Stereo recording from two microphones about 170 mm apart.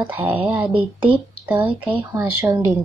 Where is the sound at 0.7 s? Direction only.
30° right (ahead or behind).